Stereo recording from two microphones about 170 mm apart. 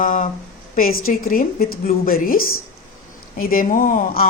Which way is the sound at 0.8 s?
60° left (ahead or behind).